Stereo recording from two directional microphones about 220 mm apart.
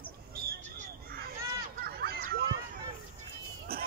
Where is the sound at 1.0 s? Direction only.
45° right (ahead or behind).